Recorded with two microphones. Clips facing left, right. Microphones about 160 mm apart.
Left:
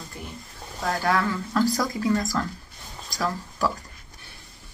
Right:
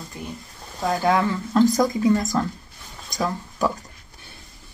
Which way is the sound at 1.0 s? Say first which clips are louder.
Right 4 dB; 20° right (ahead or behind).